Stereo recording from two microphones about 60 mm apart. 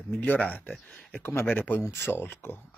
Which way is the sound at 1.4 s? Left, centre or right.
Left.